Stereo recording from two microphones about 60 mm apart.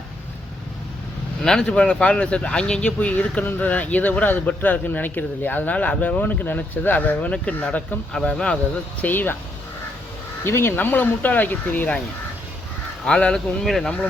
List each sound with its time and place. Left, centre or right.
1.5 s speech: centre
9.0 s speech: left
10.4 s speech: left
13.1 s speech: centre
13.8 s speech: left